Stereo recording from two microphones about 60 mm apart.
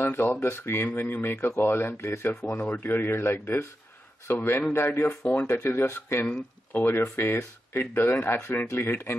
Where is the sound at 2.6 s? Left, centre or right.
Left.